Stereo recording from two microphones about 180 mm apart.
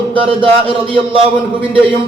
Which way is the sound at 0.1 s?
30° right (ahead or behind).